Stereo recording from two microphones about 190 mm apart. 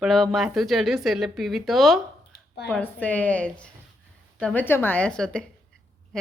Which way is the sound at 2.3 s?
60° left (ahead or behind).